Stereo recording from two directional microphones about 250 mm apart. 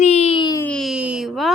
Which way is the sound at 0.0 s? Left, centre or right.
Left.